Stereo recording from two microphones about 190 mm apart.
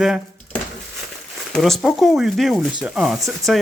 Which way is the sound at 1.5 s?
Centre (ahead or behind).